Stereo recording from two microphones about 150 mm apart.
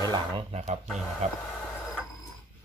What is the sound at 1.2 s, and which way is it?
Speech, 50° right (ahead or behind).